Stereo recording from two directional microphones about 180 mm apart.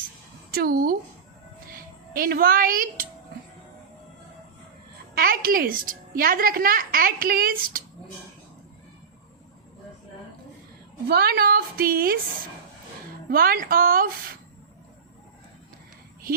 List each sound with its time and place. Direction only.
0.5 s a woman's voice: 55° right (ahead or behind)
5.1 s a woman's voice: 55° right (ahead or behind)
11.1 s a woman's voice: 60° right (ahead or behind)
13.3 s a woman's voice: 55° right (ahead or behind)